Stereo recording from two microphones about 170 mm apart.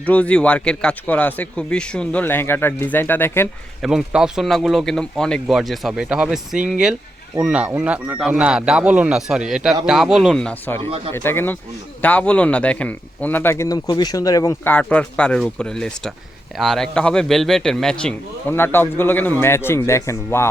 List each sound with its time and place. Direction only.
0.0 s speech: 10° left (ahead or behind)
3.8 s speech: 5° right (ahead or behind)
10.8 s speech: 35° right (ahead or behind)
11.1 s speech: 15° left (ahead or behind)